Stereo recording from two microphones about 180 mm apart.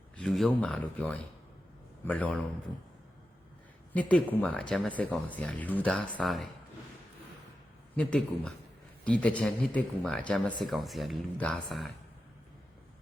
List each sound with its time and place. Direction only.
0.2 s speech: centre (ahead or behind)
3.9 s speech: 10° left (ahead or behind)
7.9 s speech: 5° left (ahead or behind)